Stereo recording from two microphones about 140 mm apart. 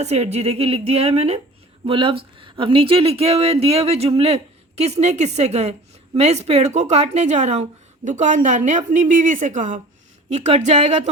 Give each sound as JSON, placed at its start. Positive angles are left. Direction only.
{"t": 0.0, "sound": "a woman's voice", "side_deg": -50}
{"t": 10.2, "sound": "speech", "side_deg": -50}